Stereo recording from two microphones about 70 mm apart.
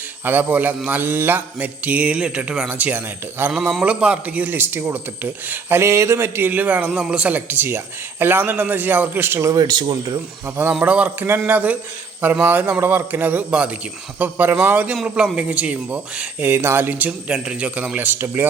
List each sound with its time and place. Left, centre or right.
0.3 s speech: right
3.5 s speech: centre; by 5.8 s right
5.8 s a man's voice: right
9.4 s speech: right
9.6 s speech: right
10.7 s speech: centre
16.5 s speech: right